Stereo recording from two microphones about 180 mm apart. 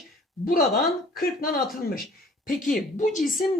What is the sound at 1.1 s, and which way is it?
A woman's voice, 50° left (ahead or behind).